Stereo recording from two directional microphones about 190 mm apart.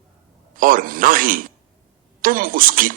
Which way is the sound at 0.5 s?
45° right (ahead or behind).